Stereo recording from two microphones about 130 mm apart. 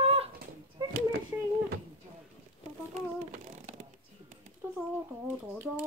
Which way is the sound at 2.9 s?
55° right (ahead or behind).